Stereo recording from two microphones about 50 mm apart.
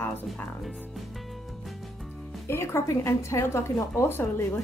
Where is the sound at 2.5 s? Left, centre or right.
Left.